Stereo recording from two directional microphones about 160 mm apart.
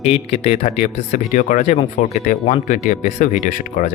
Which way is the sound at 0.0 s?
40° left (ahead or behind).